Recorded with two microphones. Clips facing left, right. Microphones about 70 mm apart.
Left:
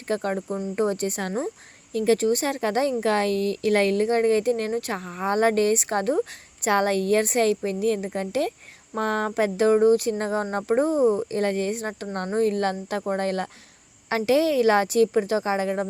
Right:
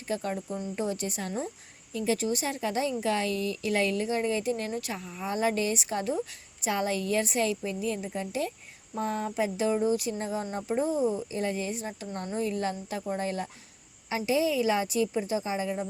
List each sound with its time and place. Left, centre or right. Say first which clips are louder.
0.1 s speech: left 6 dB; left
1.9 s a woman's voice: left 8 dB; left